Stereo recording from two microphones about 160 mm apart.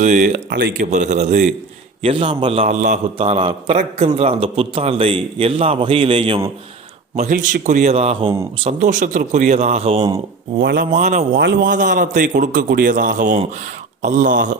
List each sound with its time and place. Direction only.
0.0 s a man's voice: 50° right (ahead or behind)
2.0 s a man's voice: 35° right (ahead or behind)
7.2 s a man's voice: 55° right (ahead or behind); by 8.3 s 40° right (ahead or behind)
8.6 s a man's voice: 50° right (ahead or behind)
11.3 s a man's voice: 90° right
11.7 s a man's voice: 55° right (ahead or behind)